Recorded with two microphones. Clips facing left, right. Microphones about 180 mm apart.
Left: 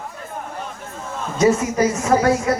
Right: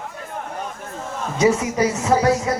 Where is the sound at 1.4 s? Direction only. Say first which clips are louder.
Left 1 dB; 15° right (ahead or behind).